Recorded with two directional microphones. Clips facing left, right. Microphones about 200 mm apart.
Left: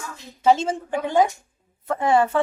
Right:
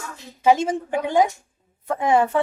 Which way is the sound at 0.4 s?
15° right (ahead or behind).